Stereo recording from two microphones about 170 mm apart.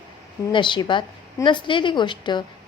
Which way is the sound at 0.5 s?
25° left (ahead or behind).